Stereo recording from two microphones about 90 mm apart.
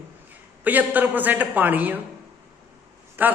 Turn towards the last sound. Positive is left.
turn(degrees=-20)  # may be behind; listen again after turning